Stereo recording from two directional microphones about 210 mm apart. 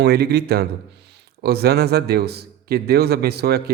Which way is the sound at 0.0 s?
50° right (ahead or behind).